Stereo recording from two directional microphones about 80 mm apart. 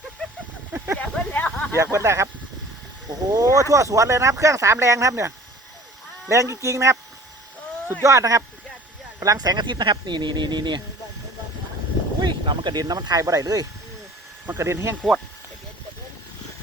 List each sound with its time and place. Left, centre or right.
0.9 s a sound: centre
1.7 s speech: right
8.0 s speech: right
12.2 s speech: right
12.8 s speech: right
14.6 s speech: right